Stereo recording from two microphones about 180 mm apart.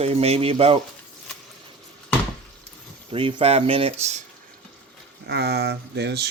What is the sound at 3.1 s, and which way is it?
Speech, 30° right (ahead or behind).